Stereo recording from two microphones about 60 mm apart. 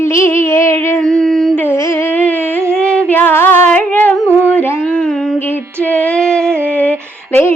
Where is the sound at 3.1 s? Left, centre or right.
Left.